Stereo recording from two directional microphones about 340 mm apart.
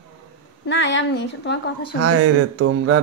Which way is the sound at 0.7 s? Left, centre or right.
Left.